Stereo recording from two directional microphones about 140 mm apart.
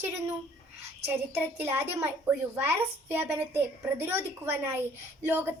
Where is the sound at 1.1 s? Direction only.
15° right (ahead or behind).